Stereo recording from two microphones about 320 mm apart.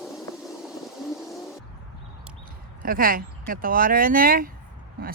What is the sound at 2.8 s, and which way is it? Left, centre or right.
Speech, right.